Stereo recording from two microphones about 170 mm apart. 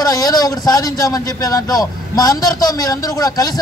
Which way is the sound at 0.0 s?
20° left (ahead or behind).